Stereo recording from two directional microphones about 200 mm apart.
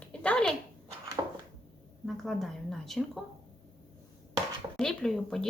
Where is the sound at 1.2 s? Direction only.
15° right (ahead or behind).